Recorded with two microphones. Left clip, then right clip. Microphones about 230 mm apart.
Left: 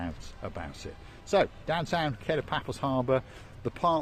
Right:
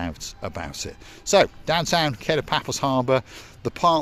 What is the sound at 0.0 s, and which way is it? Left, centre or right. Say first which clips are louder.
Speech: right 8 dB; right.